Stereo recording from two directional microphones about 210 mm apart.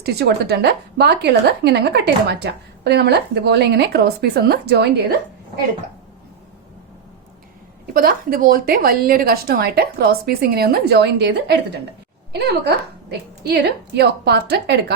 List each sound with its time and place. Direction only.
0.0 s a woman's voice: 50° right (ahead or behind)
7.9 s a woman's voice: 40° right (ahead or behind)